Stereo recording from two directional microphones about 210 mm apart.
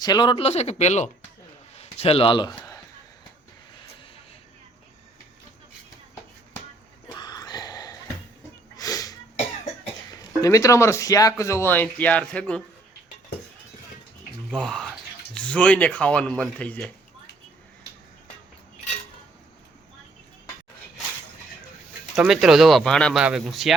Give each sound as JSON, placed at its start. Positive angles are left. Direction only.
{"t": 0.0, "sound": "speech", "side_deg": 20}
{"t": 2.6, "sound": "a sound", "side_deg": 15}
{"t": 7.1, "sound": "a sound", "side_deg": 20}
{"t": 10.1, "sound": "speech", "side_deg": 15}
{"t": 14.5, "sound": "speech", "side_deg": 0}
{"t": 22.1, "sound": "speech", "side_deg": 0}